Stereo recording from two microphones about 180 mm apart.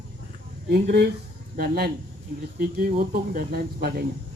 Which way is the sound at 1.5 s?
55° right (ahead or behind).